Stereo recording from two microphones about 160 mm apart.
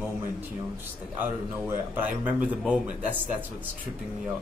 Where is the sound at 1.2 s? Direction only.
10° right (ahead or behind).